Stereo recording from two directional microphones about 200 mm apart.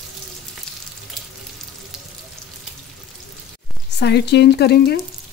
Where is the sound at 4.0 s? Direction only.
55° left (ahead or behind).